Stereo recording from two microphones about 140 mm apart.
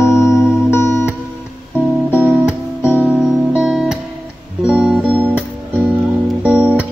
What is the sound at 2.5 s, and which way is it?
Music, 15° left (ahead or behind).